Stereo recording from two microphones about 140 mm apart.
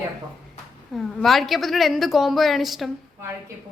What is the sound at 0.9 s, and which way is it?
A woman's voice, centre (ahead or behind).